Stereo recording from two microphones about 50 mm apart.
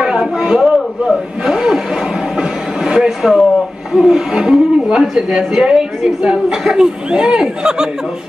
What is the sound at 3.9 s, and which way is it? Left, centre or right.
Speech, centre.